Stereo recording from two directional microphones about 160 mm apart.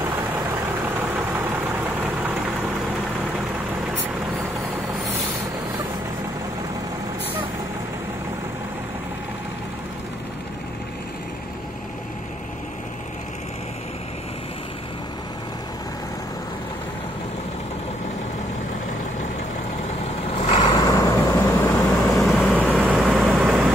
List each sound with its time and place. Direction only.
0.8 s vehicle: 10° right (ahead or behind)
20.4 s vehicle: 30° left (ahead or behind)
22.1 s vehicle: centre (ahead or behind)